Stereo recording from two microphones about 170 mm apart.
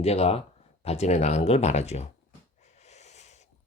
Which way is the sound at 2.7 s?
40° left (ahead or behind).